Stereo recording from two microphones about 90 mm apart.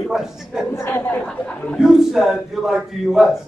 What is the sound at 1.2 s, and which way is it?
Speech, 15° left (ahead or behind).